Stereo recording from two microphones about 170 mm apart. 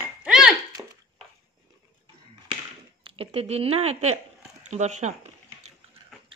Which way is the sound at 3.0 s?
35° right (ahead or behind).